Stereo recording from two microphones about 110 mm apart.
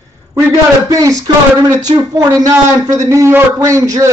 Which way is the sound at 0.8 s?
30° right (ahead or behind).